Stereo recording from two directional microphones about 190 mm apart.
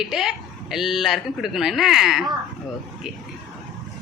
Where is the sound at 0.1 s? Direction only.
Centre (ahead or behind).